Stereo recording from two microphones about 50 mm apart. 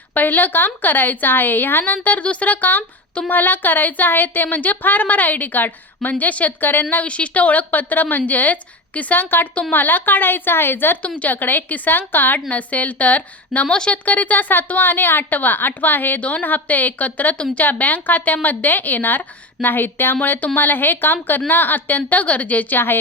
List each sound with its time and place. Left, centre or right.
0.1 s speech: left
6.9 s a woman's voice: left
11.0 s speech: left
14.0 s speech: left
17.3 s speech: left
17.6 s a woman's voice: left